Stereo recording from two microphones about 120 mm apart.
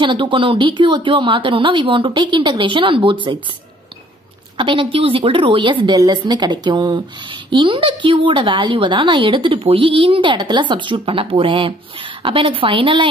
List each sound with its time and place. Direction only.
0.0 s a woman's voice: 45° right (ahead or behind)
4.6 s a woman's voice: 45° right (ahead or behind)